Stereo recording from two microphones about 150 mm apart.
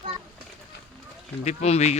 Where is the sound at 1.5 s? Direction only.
45° left (ahead or behind).